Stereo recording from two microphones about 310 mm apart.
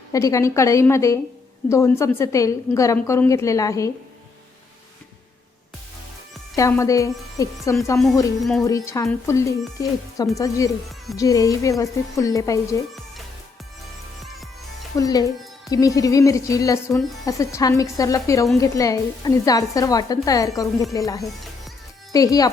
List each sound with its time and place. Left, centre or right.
0.1 s speech: centre
6.6 s speech: centre
14.9 s speech: centre